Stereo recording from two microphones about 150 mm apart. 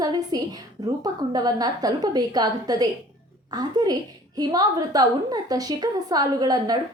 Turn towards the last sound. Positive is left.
turn(degrees=-25)  # may be behind; listen again after turning